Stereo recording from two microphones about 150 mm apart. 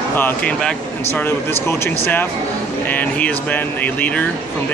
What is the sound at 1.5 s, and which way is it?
Speech, 15° left (ahead or behind).